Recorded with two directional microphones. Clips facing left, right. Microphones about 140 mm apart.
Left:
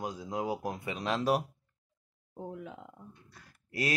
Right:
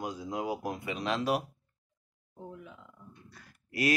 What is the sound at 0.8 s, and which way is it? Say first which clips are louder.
Speech: left 1 dB; 35° left (ahead or behind).